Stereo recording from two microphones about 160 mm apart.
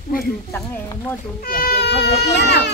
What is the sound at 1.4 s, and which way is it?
Speech, 65° left (ahead or behind).